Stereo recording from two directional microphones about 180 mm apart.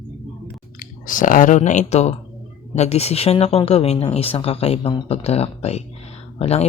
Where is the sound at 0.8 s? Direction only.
45° left (ahead or behind).